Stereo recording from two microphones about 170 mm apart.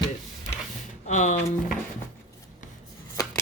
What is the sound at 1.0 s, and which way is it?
Speech, 45° left (ahead or behind).